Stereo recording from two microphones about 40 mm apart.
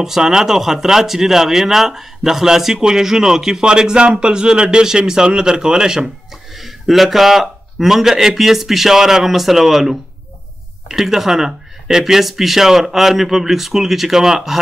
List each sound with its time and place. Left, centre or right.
0.0 s speech: centre
6.5 s speech: centre